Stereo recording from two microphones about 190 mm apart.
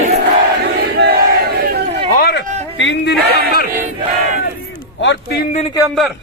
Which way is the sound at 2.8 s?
70° left (ahead or behind).